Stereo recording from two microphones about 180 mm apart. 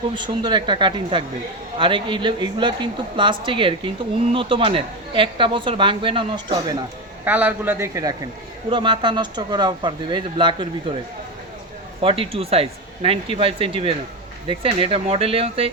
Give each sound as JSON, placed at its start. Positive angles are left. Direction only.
{"t": 0.1, "sound": "a woman's voice", "side_deg": -25}
{"t": 7.3, "sound": "a man's voice", "side_deg": -10}
{"t": 8.7, "sound": "a woman's voice", "side_deg": -25}
{"t": 11.9, "sound": "speech", "side_deg": -30}